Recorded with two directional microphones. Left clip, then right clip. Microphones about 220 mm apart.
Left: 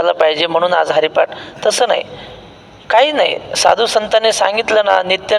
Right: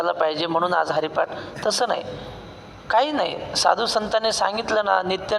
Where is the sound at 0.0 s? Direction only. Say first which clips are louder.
Left 9 dB; 40° left (ahead or behind).